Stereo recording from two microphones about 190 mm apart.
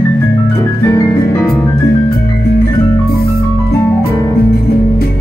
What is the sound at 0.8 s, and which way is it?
Music, 15° left (ahead or behind).